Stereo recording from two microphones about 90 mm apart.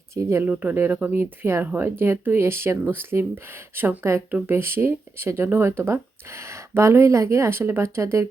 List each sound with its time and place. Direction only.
0.1 s speech: 30° right (ahead or behind)
0.4 s speech: 15° right (ahead or behind)